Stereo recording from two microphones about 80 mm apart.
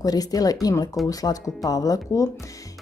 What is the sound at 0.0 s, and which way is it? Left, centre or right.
Speech, left.